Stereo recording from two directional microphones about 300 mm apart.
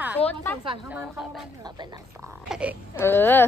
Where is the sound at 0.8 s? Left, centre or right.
Centre.